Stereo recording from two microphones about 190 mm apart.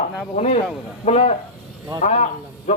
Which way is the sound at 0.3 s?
40° left (ahead or behind).